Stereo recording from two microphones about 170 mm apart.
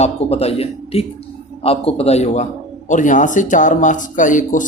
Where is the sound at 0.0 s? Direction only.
35° left (ahead or behind).